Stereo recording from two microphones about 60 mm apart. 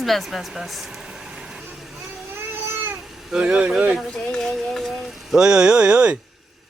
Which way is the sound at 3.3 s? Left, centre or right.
Centre.